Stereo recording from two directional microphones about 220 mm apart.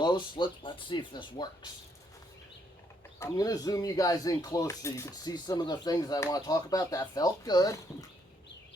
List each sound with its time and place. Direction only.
0.0 s speech: 20° left (ahead or behind)
3.2 s speech: 15° left (ahead or behind)